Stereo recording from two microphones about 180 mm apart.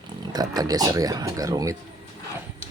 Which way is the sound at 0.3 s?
20° right (ahead or behind).